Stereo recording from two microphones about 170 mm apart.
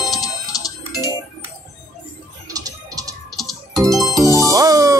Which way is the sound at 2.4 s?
20° right (ahead or behind).